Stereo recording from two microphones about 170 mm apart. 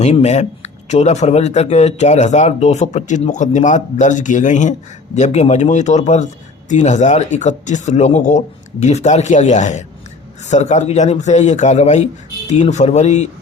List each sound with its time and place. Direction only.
0.0 s a man's voice: 40° left (ahead or behind)